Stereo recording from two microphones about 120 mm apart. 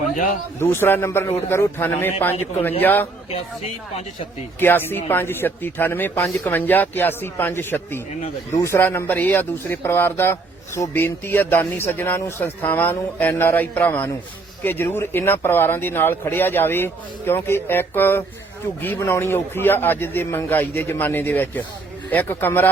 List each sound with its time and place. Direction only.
0.6 s a man's voice: 20° left (ahead or behind)
3.3 s speech: 50° left (ahead or behind)
4.6 s a man's voice: 15° left (ahead or behind)